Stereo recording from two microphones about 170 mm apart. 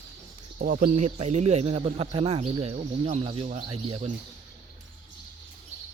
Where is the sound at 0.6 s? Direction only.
55° right (ahead or behind); by 4.1 s 35° right (ahead or behind).